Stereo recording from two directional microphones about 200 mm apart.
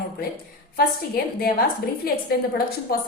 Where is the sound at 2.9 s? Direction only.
50° left (ahead or behind).